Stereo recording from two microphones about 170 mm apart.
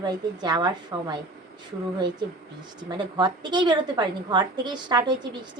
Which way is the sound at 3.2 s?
25° right (ahead or behind).